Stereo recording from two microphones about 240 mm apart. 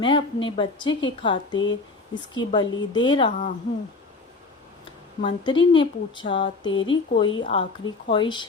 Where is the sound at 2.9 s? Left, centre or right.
Centre.